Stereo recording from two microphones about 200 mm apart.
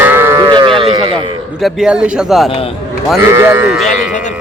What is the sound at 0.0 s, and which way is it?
Livestock, 10° right (ahead or behind).